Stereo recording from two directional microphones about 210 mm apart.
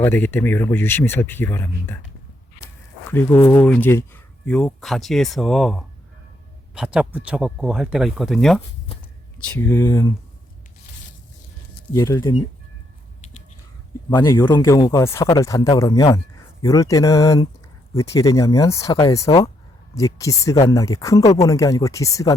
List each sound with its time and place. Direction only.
0.0 s speech: 10° left (ahead or behind)
3.1 s speech: 10° left (ahead or behind)
11.9 s speech: 15° left (ahead or behind)
14.2 s speech: 15° left (ahead or behind)